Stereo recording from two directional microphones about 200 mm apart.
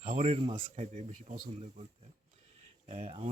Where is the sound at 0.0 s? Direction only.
35° right (ahead or behind).